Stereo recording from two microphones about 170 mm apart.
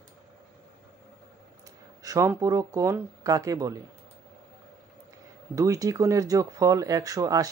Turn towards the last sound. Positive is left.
turn(degrees=-20)  # may be behind; listen again after turning